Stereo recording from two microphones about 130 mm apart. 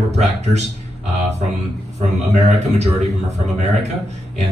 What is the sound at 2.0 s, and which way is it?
A man's voice, 55° right (ahead or behind).